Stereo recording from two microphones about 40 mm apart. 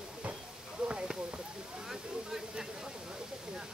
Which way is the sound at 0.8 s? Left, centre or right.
Right.